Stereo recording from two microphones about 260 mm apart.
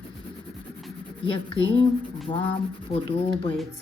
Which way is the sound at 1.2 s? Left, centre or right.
Centre.